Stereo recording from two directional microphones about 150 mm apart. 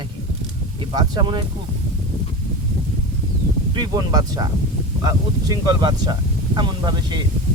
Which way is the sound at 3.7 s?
30° right (ahead or behind).